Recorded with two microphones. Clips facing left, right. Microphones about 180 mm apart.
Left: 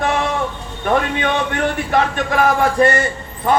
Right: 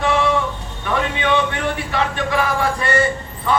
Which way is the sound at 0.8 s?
45° left (ahead or behind).